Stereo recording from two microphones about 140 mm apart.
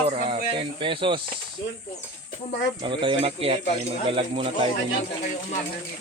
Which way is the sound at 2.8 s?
35° right (ahead or behind).